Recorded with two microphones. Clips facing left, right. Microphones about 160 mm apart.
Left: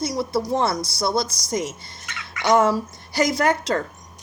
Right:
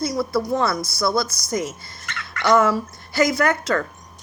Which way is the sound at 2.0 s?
10° left (ahead or behind).